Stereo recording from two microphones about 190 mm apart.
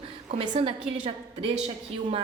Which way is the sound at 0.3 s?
30° right (ahead or behind).